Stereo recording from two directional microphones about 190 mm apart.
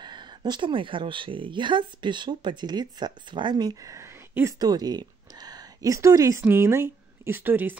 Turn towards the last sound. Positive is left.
turn(degrees=-10)  # may be behind; listen again after turning